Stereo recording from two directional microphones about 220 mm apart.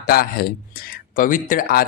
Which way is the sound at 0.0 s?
45° left (ahead or behind).